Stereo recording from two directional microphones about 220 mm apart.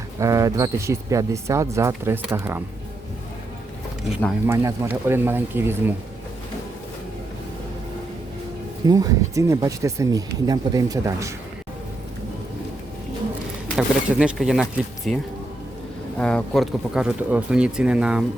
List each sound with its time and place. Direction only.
0.2 s speech: 15° right (ahead or behind)
4.4 s speech: 15° right (ahead or behind)
8.9 s speech: 15° right (ahead or behind)
13.7 s speech: centre (ahead or behind)